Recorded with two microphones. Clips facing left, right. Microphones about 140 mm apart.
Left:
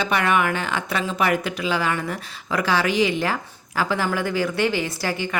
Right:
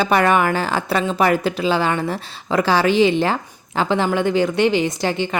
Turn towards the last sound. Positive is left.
turn(degrees=-25)  # may be behind; listen again after turning